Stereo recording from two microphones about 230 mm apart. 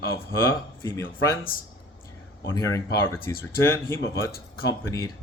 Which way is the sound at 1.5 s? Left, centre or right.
Left.